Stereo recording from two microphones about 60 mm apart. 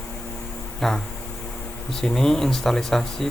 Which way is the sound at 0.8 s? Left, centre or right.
Centre.